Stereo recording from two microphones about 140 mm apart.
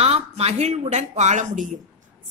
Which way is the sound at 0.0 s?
45° right (ahead or behind).